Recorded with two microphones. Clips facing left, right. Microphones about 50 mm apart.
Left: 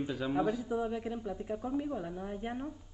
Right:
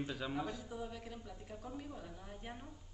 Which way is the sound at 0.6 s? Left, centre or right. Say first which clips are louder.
Left 12 dB; left.